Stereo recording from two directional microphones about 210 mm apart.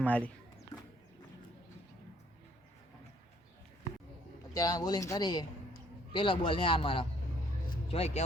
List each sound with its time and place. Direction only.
0.0 s speech: 5° left (ahead or behind)
4.5 s a man's voice: 15° left (ahead or behind)